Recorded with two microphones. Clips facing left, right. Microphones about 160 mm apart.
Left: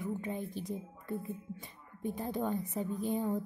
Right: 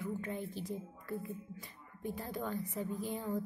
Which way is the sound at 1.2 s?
25° left (ahead or behind).